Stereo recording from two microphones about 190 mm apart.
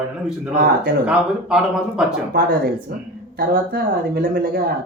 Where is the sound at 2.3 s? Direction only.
50° right (ahead or behind).